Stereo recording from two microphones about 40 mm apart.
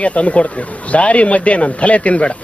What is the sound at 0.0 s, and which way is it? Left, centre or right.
Speech, left.